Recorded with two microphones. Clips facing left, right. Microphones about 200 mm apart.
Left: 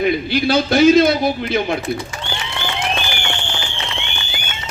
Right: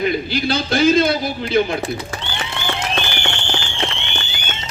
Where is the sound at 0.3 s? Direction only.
60° left (ahead or behind).